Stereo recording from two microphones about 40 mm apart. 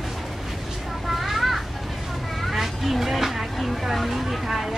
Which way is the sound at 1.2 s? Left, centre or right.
Centre.